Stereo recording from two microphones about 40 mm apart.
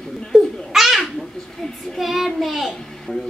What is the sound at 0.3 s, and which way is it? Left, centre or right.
Babbling, centre.